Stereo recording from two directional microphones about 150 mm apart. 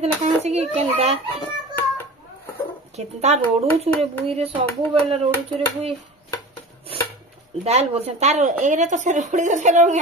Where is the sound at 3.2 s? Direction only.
45° right (ahead or behind).